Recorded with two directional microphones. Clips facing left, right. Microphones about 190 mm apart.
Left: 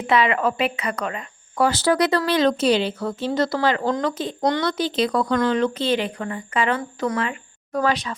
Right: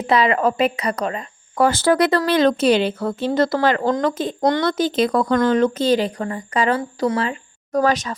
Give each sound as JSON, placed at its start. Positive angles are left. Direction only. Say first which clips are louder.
{"t": 0.1, "sound": "speech", "louder": "right 2 dB", "side_deg": -35}
{"t": 1.5, "sound": "speech", "louder": "right 3 dB", "side_deg": -50}